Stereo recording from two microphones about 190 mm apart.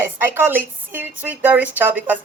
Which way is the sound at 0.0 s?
10° right (ahead or behind).